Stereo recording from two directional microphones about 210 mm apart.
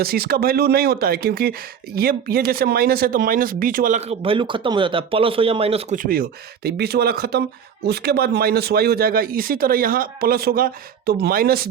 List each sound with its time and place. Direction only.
0.0 s speech: 45° right (ahead or behind); by 6.0 s 30° right (ahead or behind)
6.0 s speech: 45° right (ahead or behind)